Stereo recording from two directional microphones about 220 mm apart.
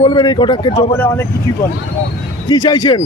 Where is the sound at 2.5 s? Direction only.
20° left (ahead or behind).